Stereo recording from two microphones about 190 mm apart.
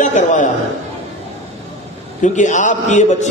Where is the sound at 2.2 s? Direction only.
40° left (ahead or behind).